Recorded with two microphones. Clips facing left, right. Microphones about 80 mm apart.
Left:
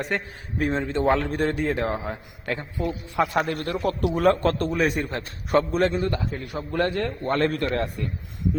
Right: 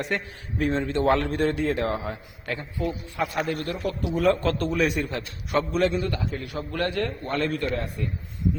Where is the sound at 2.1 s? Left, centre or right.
Left.